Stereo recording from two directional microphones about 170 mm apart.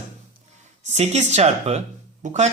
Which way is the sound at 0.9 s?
40° right (ahead or behind).